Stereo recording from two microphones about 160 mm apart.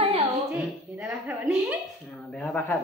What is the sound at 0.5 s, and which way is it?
A woman's voice, 5° right (ahead or behind).